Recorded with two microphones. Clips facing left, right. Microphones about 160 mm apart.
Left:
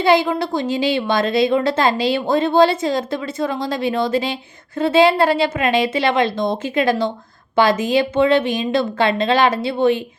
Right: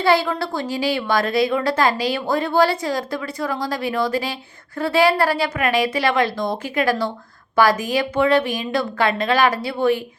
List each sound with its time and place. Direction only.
0.0 s a woman's voice: 20° left (ahead or behind)